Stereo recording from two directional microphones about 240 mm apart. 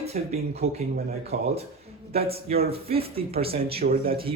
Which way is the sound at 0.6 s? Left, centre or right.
Right.